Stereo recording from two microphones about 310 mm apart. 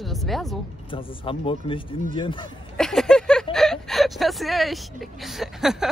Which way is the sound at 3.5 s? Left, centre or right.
Centre.